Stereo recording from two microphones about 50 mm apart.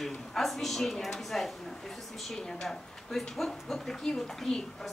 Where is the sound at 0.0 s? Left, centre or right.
Centre.